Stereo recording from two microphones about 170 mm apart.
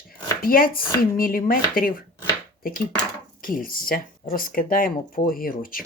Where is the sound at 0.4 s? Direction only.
60° left (ahead or behind).